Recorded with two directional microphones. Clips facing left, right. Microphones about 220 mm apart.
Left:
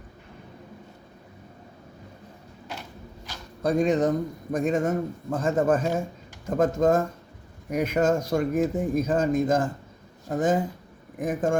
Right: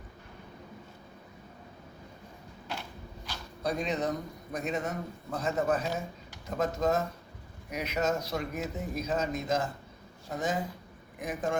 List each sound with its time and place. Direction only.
3.6 s speech: 50° left (ahead or behind)